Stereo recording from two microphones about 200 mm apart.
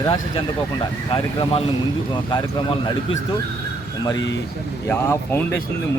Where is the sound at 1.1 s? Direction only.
25° left (ahead or behind).